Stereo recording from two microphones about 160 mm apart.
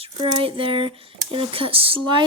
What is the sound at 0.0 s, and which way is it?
Speech, 35° right (ahead or behind).